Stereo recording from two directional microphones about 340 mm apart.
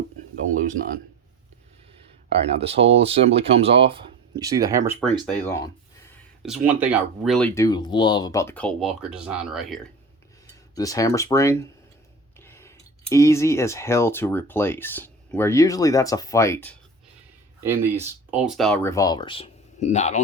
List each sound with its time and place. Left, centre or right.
0.5 s speech: right
2.3 s speech: centre
5.2 s speech: centre
10.8 s speech: centre
17.6 s speech: centre